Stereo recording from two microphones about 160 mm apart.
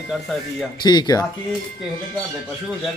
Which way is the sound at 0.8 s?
25° left (ahead or behind).